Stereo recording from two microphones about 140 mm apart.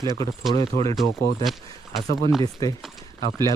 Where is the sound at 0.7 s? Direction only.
90° left.